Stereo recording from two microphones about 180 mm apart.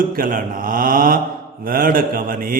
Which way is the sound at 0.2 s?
50° right (ahead or behind).